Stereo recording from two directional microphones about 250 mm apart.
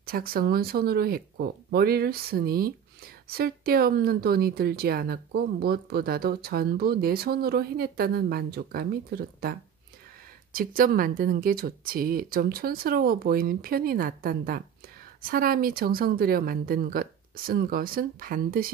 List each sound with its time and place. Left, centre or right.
0.0 s a woman's voice: right